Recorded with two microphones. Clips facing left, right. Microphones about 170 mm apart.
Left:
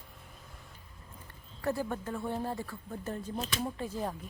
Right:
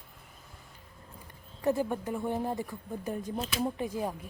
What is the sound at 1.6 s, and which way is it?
Speech, 20° right (ahead or behind).